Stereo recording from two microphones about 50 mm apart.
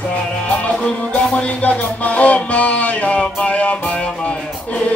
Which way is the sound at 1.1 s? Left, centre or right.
Left.